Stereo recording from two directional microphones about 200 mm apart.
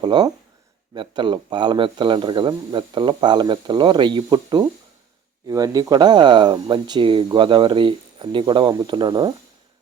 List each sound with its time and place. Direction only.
0.0 s speech: 20° right (ahead or behind)